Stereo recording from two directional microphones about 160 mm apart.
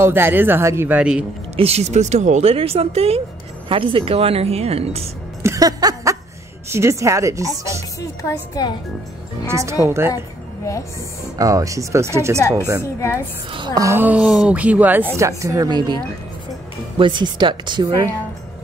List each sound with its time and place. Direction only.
0.0 s a woman's voice: 15° right (ahead or behind)
1.6 s speech: 40° right (ahead or behind)
5.4 s music: 20° right (ahead or behind)
6.7 s speech: 15° right (ahead or behind)
8.0 s speech: 20° left (ahead or behind)
9.5 s a woman's voice: 20° right (ahead or behind)
10.1 s a sound: 20° left (ahead or behind)
11.3 s speech: 20° right (ahead or behind)
13.7 s a woman's voice: 15° right (ahead or behind)
17.0 s speech: 30° right (ahead or behind)